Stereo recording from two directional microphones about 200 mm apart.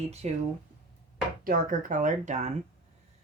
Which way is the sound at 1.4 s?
45° right (ahead or behind).